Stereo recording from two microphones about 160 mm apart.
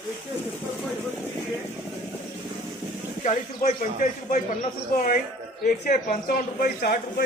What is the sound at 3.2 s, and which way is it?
Speech, 50° left (ahead or behind).